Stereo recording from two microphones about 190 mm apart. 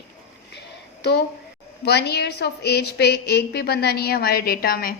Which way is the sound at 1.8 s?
60° left (ahead or behind).